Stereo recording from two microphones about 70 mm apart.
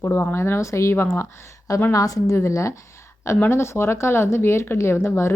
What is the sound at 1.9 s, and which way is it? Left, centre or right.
Speech, left.